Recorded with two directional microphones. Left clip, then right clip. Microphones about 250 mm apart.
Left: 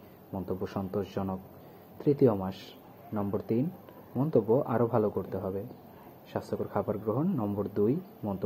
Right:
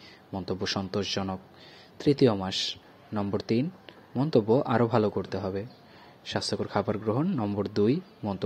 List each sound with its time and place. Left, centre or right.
0.3 s a man's voice: right